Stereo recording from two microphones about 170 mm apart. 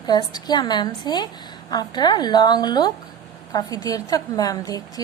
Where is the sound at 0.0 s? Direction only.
25° left (ahead or behind).